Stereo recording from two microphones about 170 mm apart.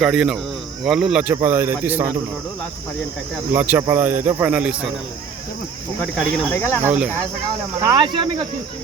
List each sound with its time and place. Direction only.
0.0 s speech: 5° right (ahead or behind)
3.5 s speech: 10° right (ahead or behind)
6.0 s speech: 5° left (ahead or behind)
6.8 s speech: 5° right (ahead or behind)
7.8 s cricket: 25° right (ahead or behind)